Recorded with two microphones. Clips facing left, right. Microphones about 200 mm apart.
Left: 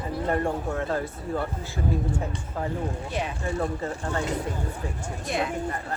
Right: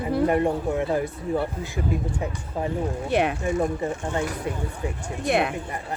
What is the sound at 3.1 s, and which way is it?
Speech, 65° right (ahead or behind).